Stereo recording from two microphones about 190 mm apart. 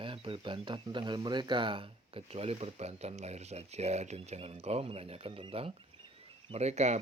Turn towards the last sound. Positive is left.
turn(degrees=-35)  # may be behind; listen again after turning